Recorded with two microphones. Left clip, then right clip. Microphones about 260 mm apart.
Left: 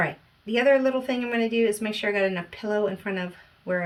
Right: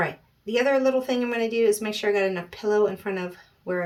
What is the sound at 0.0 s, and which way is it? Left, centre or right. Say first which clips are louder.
Speech: even; right.